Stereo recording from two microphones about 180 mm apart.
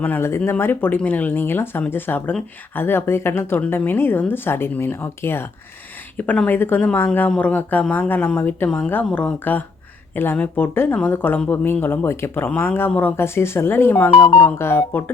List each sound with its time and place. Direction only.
0.0 s speech: 10° left (ahead or behind)